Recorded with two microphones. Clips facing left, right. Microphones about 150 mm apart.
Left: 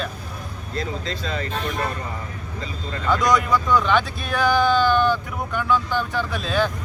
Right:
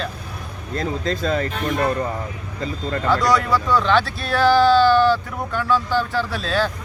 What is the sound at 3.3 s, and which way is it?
Speech, centre (ahead or behind).